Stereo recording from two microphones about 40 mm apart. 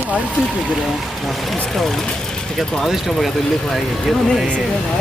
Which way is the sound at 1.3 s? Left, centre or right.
Centre.